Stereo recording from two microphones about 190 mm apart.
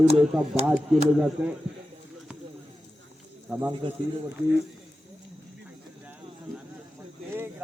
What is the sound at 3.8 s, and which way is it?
Speech, 25° right (ahead or behind).